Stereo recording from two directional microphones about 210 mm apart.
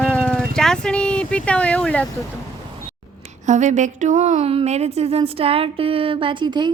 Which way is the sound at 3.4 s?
35° right (ahead or behind).